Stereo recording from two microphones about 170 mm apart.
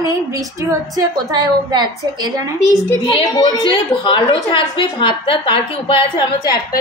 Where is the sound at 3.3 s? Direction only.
25° left (ahead or behind).